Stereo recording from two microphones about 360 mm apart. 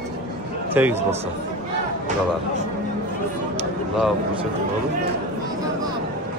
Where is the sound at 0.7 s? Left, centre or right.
Centre.